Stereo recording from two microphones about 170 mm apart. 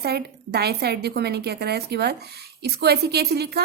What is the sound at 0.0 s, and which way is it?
A woman's voice, 70° right (ahead or behind).